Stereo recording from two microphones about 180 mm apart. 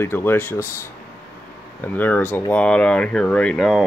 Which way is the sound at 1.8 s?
10° left (ahead or behind).